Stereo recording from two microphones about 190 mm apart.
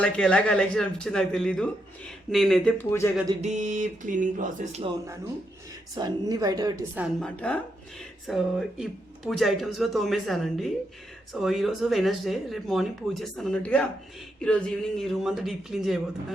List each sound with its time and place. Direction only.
0.0 s speech: 5° left (ahead or behind)
2.7 s speech: 15° left (ahead or behind)
3.4 s speech: 40° right (ahead or behind)
5.9 s speech: 20° right (ahead or behind)
6.9 s speech: 5° right (ahead or behind)
7.3 s speech: 5° left (ahead or behind)